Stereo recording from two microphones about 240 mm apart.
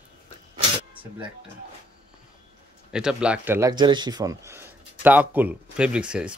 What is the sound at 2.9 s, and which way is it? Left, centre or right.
Speech, centre.